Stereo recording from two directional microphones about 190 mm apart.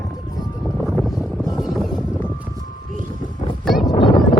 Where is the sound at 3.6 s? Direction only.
Centre (ahead or behind).